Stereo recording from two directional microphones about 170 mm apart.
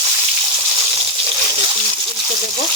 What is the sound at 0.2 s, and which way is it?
Water, 25° right (ahead or behind).